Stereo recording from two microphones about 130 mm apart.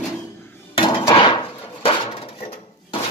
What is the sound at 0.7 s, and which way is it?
Dishes, 35° left (ahead or behind).